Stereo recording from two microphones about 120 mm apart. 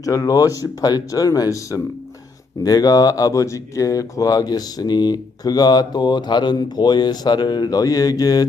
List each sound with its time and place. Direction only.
0.0 s speech: 30° left (ahead or behind)